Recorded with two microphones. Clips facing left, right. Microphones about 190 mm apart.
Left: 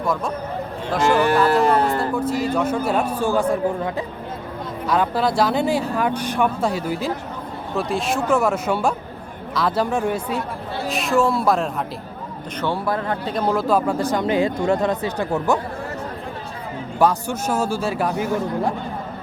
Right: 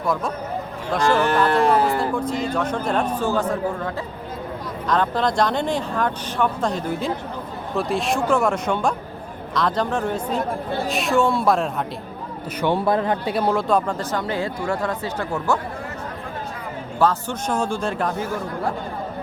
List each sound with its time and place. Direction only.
1.0 s speech: 15° left (ahead or behind)
12.5 s a man's voice: 20° right (ahead or behind)
13.3 s speech: centre (ahead or behind); by 15.5 s 15° left (ahead or behind)
17.0 s speech: 10° left (ahead or behind)